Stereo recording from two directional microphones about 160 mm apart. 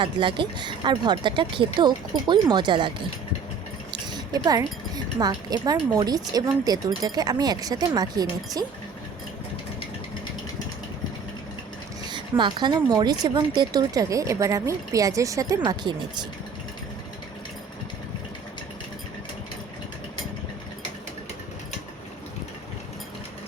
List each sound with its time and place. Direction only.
0.0 s speech: 30° right (ahead or behind)
4.4 s speech: 25° right (ahead or behind)
12.1 s speech: 30° right (ahead or behind)